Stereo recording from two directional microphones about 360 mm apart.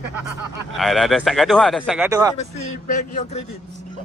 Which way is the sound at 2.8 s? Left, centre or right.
Centre.